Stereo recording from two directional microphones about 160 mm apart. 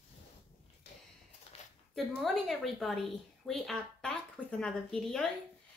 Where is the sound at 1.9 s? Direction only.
Centre (ahead or behind).